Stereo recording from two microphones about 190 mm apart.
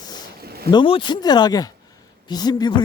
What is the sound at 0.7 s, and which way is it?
Speech, 25° left (ahead or behind).